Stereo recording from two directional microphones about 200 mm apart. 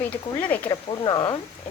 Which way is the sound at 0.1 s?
10° left (ahead or behind).